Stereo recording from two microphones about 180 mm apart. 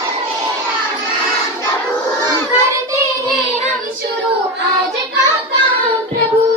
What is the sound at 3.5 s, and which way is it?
Child singing, 40° right (ahead or behind).